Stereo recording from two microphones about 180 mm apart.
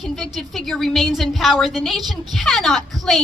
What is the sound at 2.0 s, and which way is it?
Speech, 25° right (ahead or behind).